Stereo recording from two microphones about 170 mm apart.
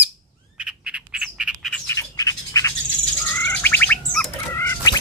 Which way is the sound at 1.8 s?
20° left (ahead or behind).